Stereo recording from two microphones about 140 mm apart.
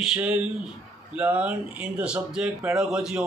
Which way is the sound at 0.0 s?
5° right (ahead or behind).